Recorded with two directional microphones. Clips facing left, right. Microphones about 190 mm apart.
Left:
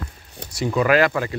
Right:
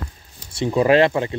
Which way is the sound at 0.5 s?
30° right (ahead or behind).